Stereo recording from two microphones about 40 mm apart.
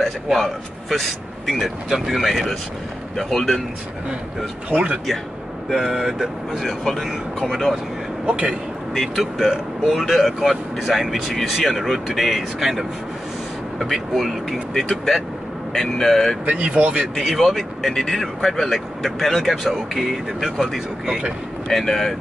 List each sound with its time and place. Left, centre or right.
0.3 s speech: centre
5.8 s speech: centre
8.3 s speech: right
8.9 s speech: centre
9.2 s speech: centre
14.7 s speech: centre
16.4 s speech: right
17.2 s speech: centre